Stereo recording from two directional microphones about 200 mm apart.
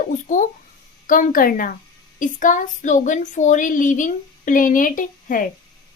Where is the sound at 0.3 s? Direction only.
40° left (ahead or behind).